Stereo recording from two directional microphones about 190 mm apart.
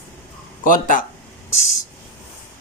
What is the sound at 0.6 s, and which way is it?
Speech, 45° left (ahead or behind).